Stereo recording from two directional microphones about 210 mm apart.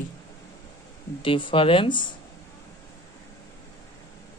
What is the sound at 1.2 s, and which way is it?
Speech, 25° left (ahead or behind).